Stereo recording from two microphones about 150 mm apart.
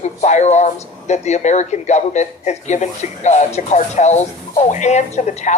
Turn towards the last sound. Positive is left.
turn(degrees=50)  # may be behind; listen again after turning